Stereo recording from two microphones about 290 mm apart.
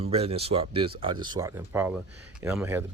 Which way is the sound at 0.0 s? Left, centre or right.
Right.